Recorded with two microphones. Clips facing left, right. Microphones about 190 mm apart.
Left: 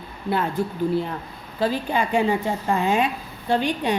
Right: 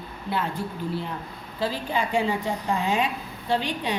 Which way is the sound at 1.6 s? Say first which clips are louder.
Left 4 dB; 55° left (ahead or behind).